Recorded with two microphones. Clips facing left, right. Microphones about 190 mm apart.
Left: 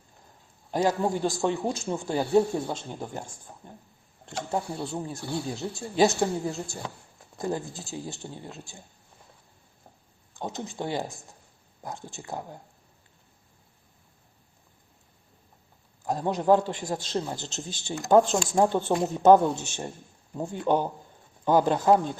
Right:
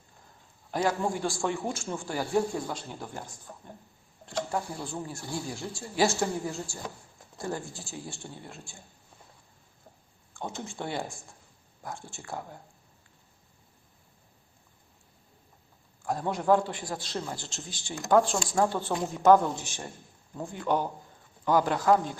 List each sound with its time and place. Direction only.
0.7 s speech: 20° left (ahead or behind)
4.3 s speech: 20° left (ahead or behind)
7.3 s speech: 20° left (ahead or behind)
10.3 s speech: 20° left (ahead or behind)
16.0 s speech: 20° left (ahead or behind)